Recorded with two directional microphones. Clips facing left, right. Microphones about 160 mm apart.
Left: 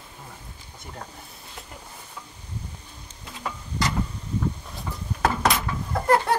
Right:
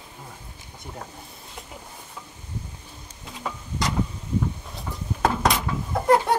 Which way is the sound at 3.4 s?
5° right (ahead or behind).